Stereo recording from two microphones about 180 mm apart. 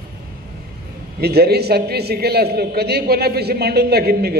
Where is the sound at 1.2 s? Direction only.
60° right (ahead or behind).